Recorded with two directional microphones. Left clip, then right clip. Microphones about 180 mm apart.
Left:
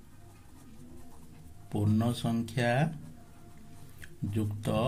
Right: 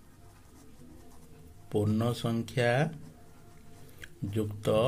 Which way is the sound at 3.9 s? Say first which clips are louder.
Right 2 dB; 30° right (ahead or behind).